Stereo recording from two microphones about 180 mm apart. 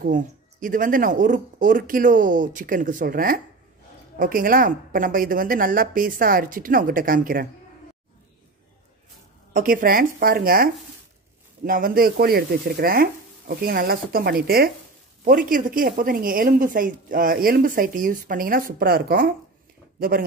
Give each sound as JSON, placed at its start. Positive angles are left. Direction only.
{"t": 0.0, "sound": "a woman's voice", "side_deg": -50}
{"t": 9.5, "sound": "a woman's voice", "side_deg": -50}